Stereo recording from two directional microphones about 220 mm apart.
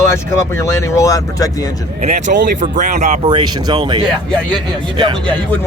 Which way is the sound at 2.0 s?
35° right (ahead or behind).